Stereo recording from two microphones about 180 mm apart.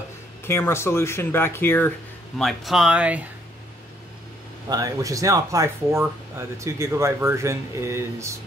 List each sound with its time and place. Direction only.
0.5 s speech: 15° left (ahead or behind); by 3.3 s 5° right (ahead or behind)
4.6 s speech: 20° right (ahead or behind)